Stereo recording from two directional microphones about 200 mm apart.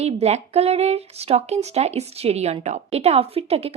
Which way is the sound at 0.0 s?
30° right (ahead or behind).